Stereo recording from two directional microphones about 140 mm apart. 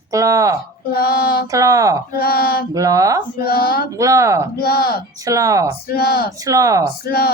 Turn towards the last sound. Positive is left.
turn(degrees=90)